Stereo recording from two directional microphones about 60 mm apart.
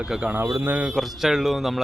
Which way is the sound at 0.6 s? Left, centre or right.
Right.